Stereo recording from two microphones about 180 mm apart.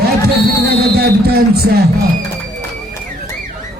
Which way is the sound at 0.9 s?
60° right (ahead or behind).